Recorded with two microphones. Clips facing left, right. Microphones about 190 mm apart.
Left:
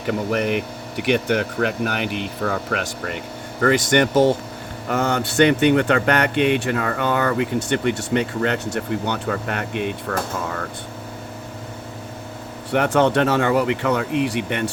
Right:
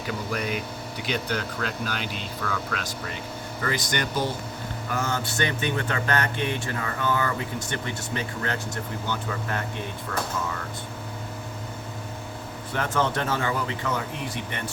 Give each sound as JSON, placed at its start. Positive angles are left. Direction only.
{"t": 0.0, "sound": "speech", "side_deg": 65}
{"t": 12.7, "sound": "speech", "side_deg": 70}